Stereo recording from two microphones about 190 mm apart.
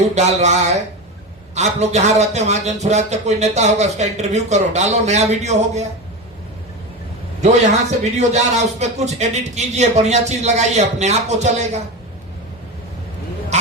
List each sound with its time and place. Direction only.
0.0 s a man's voice: 35° right (ahead or behind)
7.4 s a man's voice: 35° right (ahead or behind)